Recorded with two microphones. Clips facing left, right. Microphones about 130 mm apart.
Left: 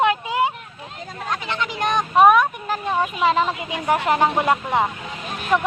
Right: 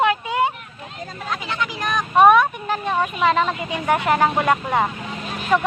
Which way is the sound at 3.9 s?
20° left (ahead or behind).